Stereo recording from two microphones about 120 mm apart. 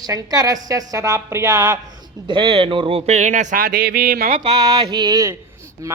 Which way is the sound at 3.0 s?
80° right.